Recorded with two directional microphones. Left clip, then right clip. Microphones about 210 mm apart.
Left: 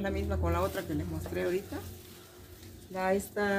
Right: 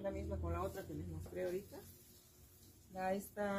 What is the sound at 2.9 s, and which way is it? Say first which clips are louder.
Speech: left 10 dB; 15° left (ahead or behind).